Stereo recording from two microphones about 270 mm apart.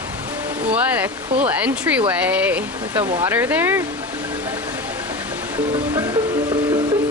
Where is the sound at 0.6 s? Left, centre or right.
Centre.